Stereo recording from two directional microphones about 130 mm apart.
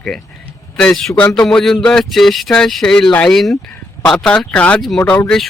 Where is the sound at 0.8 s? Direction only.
5° left (ahead or behind).